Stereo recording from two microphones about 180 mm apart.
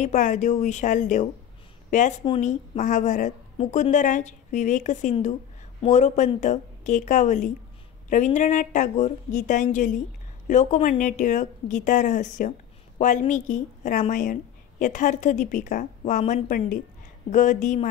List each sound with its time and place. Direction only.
0.0 s a woman's voice: 45° left (ahead or behind)